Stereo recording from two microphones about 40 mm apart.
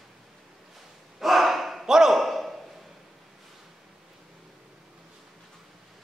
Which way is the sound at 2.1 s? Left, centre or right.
Centre.